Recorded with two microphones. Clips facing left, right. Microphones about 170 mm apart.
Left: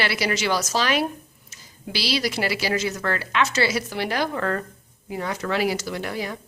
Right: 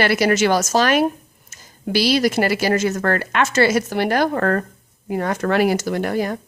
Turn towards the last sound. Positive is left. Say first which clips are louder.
# right 8 dB
turn(degrees=-50)  # may be behind; listen again after turning